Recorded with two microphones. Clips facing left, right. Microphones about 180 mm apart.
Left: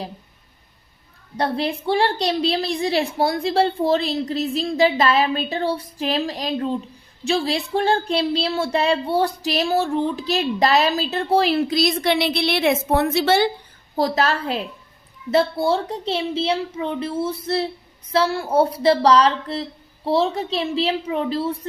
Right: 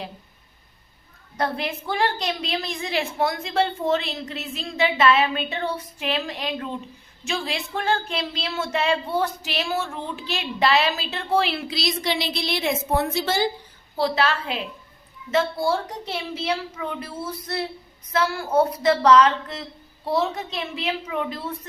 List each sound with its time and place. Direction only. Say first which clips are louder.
1.4 s speech: left 4 dB; 30° left (ahead or behind); by 13.5 s 70° left (ahead or behind)
13.9 s a child's voice: left 2 dB; 40° left (ahead or behind)